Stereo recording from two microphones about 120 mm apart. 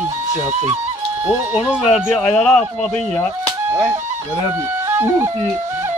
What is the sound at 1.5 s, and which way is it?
Speech, 10° right (ahead or behind).